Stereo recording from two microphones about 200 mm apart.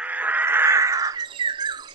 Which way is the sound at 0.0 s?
5° right (ahead or behind).